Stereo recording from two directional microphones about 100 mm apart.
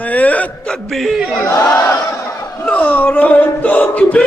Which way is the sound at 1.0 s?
Centre (ahead or behind).